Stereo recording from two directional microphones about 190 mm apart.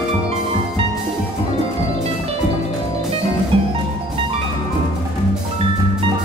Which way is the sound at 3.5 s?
30° right (ahead or behind).